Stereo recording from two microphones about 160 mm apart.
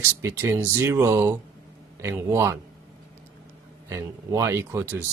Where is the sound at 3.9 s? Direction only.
20° right (ahead or behind).